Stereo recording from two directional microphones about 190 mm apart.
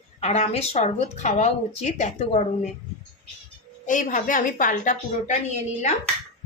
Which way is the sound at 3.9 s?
40° left (ahead or behind).